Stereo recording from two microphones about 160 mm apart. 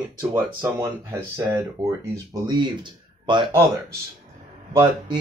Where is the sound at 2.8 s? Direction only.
30° right (ahead or behind).